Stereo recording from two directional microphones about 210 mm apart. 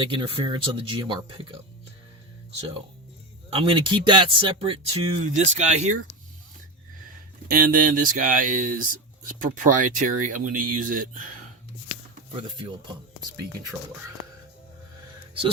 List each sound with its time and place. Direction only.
0.0 s speech: 25° right (ahead or behind)
3.5 s speech: 25° right (ahead or behind)
7.5 s speech: 40° right (ahead or behind)
12.4 s speech: 25° right (ahead or behind)